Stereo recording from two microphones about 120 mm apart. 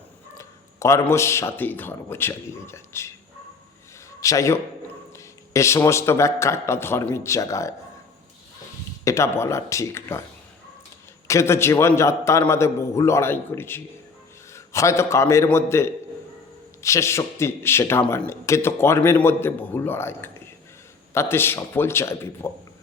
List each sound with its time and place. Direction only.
0.3 s speech: 25° left (ahead or behind)
4.2 s a man's voice: 25° left (ahead or behind)
9.0 s a man's voice: 25° left (ahead or behind)
11.3 s a man's voice: 25° left (ahead or behind)